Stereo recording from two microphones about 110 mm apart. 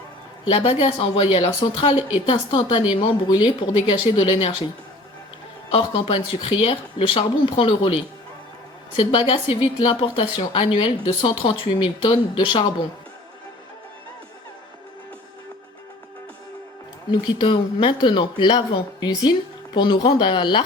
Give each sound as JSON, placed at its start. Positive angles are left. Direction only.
{"t": 0.5, "sound": "speech", "side_deg": 60}
{"t": 5.7, "sound": "speech", "side_deg": 50}
{"t": 17.1, "sound": "speech", "side_deg": 45}